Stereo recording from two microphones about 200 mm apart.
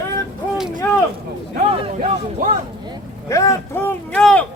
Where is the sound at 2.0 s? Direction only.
40° right (ahead or behind).